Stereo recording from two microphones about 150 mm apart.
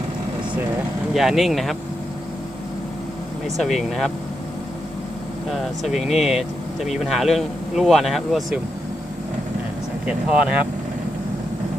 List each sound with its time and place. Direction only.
1.1 s speech: centre (ahead or behind)
3.4 s speech: centre (ahead or behind)
5.5 s speech: centre (ahead or behind)
10.1 s speech: 5° right (ahead or behind)